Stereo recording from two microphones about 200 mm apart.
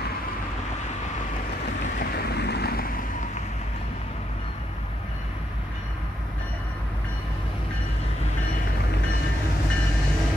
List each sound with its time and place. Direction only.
2.0 s vehicle: 50° left (ahead or behind)